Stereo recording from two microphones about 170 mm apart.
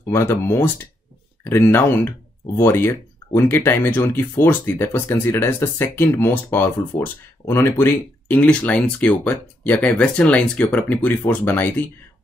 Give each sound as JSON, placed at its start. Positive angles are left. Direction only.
{"t": 0.1, "sound": "speech", "side_deg": 15}